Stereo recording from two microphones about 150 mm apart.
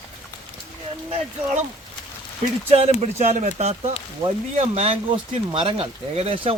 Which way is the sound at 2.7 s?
45° right (ahead or behind).